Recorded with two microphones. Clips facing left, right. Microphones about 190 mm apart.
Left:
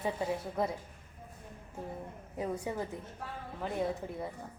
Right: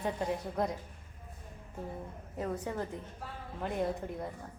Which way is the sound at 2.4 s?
10° left (ahead or behind).